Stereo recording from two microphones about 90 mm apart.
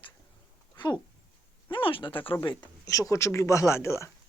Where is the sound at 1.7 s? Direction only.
70° left (ahead or behind).